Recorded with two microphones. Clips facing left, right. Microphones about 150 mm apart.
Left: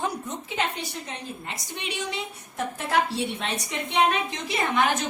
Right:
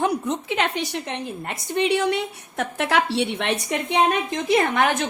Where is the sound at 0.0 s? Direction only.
75° right (ahead or behind).